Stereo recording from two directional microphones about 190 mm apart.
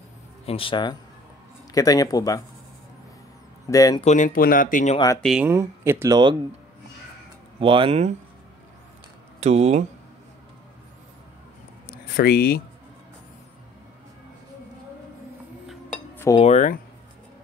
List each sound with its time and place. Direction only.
0.5 s speech: 30° left (ahead or behind)
3.6 s speech: 20° left (ahead or behind)
4.0 s speech: 40° left (ahead or behind)
4.9 s speech: 20° left (ahead or behind)
5.2 s speech: centre (ahead or behind)
5.5 s speech: 15° right (ahead or behind)
7.6 s speech: 25° right (ahead or behind)
9.4 s speech: 35° right (ahead or behind)
12.2 s speech: 55° left (ahead or behind)
16.3 s speech: 35° left (ahead or behind)